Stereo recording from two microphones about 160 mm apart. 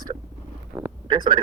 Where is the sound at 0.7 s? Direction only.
15° right (ahead or behind).